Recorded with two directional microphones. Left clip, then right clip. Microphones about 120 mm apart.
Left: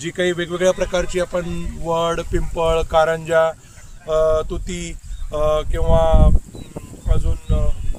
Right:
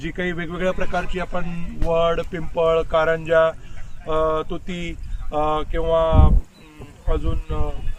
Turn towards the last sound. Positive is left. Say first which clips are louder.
# right 1 dB
turn(degrees=90)